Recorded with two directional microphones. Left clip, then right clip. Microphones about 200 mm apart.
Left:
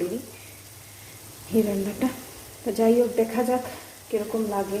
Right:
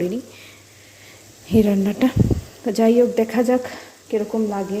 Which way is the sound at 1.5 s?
45° right (ahead or behind).